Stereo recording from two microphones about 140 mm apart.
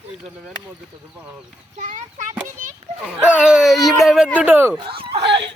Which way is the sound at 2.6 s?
75° right (ahead or behind).